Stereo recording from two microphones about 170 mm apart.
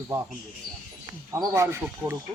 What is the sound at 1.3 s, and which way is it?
Speech, 15° right (ahead or behind).